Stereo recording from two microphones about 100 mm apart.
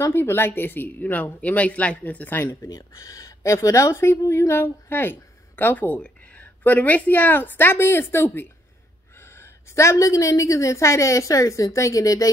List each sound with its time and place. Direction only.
0.0 s a woman's voice: 25° left (ahead or behind)
2.7 s a woman's voice: 35° left (ahead or behind)